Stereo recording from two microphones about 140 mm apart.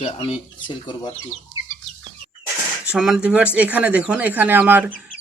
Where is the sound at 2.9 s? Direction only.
5° right (ahead or behind).